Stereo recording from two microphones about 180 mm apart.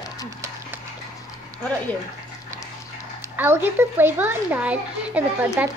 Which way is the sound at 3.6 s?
10° right (ahead or behind).